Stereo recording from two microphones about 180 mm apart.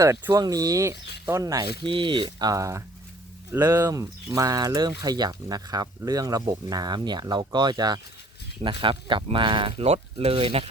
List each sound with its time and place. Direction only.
0.0 s speech: 15° right (ahead or behind); by 10.7 s 30° right (ahead or behind)